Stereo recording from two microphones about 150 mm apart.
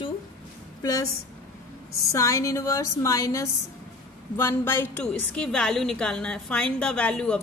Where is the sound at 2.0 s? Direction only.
20° left (ahead or behind).